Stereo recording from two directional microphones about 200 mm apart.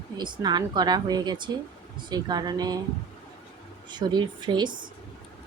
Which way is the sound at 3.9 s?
20° right (ahead or behind).